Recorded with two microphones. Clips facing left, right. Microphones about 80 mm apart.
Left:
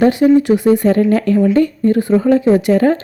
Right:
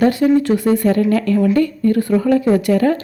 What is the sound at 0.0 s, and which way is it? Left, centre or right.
Speech, left.